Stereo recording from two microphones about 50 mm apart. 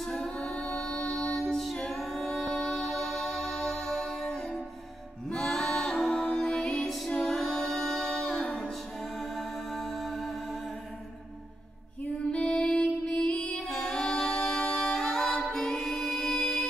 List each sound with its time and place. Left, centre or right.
0.1 s music: centre
7.1 s a capella: centre
9.2 s music: centre
12.3 s music: left
13.6 s a capella: centre